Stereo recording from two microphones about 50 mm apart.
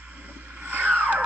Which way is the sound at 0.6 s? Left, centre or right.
Right.